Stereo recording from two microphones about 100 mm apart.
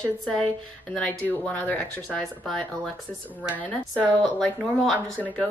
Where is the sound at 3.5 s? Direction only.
15° left (ahead or behind).